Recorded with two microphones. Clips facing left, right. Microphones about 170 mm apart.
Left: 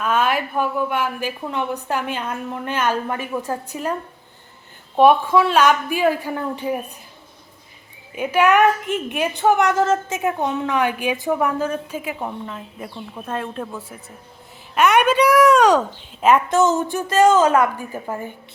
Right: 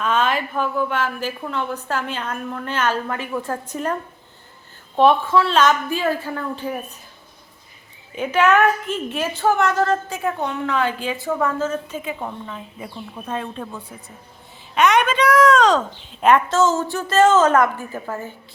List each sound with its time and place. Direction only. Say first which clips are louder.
0.0 s a woman's voice: left 1 dB; 10° left (ahead or behind)
4.9 s a woman's voice: left 2 dB; 10° left (ahead or behind)
8.1 s a woman's voice: left 1 dB; 10° left (ahead or behind)
16.6 s a woman's voice: left 1 dB; 20° left (ahead or behind)